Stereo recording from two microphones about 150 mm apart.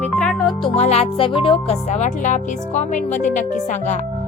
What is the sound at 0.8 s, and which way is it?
Speech, 45° left (ahead or behind).